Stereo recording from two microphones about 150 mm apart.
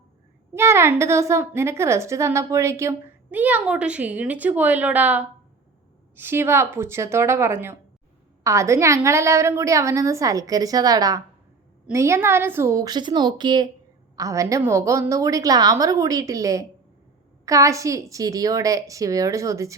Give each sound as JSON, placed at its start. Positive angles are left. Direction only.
{"t": 0.5, "sound": "a woman's voice", "side_deg": -15}